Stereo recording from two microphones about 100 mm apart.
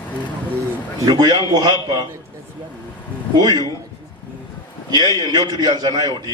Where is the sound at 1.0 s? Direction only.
40° right (ahead or behind).